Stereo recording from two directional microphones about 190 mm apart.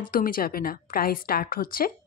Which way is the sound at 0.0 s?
50° left (ahead or behind).